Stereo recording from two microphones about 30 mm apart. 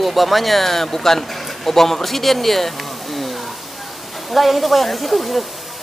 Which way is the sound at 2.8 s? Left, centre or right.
Centre.